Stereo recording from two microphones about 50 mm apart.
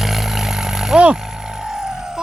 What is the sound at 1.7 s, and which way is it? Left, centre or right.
Vehicle, centre.